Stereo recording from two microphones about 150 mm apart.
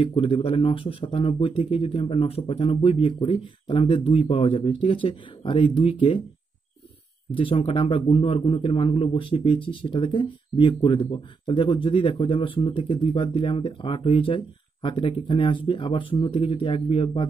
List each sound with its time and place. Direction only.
0.0 s a man's voice: 40° left (ahead or behind)
7.3 s a man's voice: 35° left (ahead or behind)